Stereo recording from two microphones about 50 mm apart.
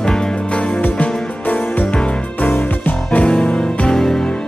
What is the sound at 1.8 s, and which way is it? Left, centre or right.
Music, centre.